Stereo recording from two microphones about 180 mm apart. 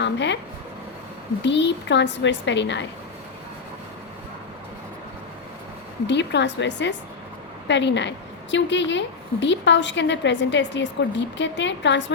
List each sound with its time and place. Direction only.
0.0 s a woman's voice: 80° left
1.4 s a woman's voice: 80° left
6.1 s a woman's voice: 75° left (ahead or behind)